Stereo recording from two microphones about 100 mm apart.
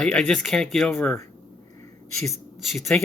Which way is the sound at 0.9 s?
20° left (ahead or behind).